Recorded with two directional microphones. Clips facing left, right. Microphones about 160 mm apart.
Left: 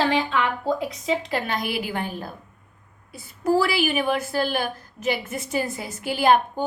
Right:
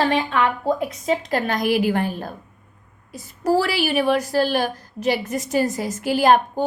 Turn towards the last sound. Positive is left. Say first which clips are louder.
# right 3 dB
turn(degrees=-40)  # may be behind; listen again after turning